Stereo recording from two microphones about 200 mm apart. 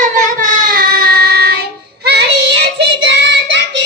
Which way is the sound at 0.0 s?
40° right (ahead or behind).